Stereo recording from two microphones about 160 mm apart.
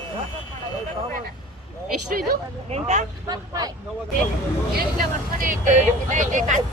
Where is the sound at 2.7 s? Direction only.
45° right (ahead or behind).